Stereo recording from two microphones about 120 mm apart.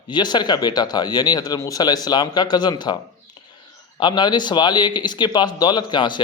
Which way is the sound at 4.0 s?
35° left (ahead or behind).